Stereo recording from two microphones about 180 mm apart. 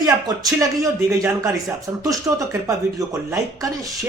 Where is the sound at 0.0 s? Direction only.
20° right (ahead or behind).